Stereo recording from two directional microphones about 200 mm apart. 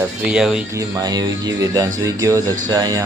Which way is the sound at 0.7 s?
20° right (ahead or behind).